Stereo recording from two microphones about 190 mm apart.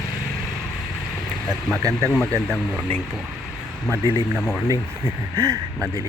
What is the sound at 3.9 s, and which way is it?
Speech, 15° right (ahead or behind).